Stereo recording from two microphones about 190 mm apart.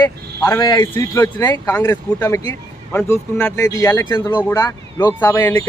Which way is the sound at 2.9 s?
5° left (ahead or behind).